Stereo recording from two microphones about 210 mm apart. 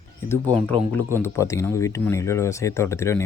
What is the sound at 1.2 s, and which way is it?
Speech, 15° left (ahead or behind).